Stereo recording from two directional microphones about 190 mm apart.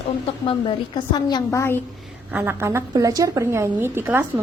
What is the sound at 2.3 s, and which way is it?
A woman's voice, 10° right (ahead or behind).